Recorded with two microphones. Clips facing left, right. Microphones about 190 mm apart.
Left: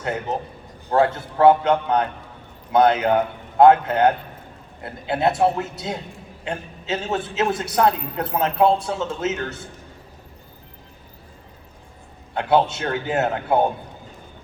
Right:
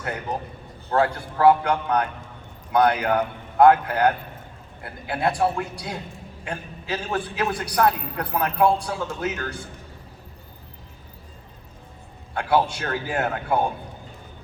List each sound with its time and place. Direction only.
0.0 s a man's voice: 25° left (ahead or behind)
12.3 s a man's voice: 25° left (ahead or behind)